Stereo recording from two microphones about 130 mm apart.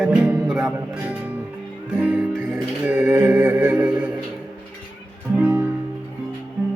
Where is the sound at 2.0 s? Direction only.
10° right (ahead or behind).